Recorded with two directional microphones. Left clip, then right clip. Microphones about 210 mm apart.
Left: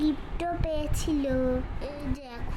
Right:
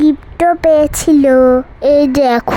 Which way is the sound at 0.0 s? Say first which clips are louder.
Right 18 dB; 45° right (ahead or behind).